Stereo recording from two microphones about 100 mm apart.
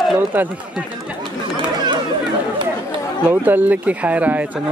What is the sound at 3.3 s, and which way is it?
Speech, 20° right (ahead or behind).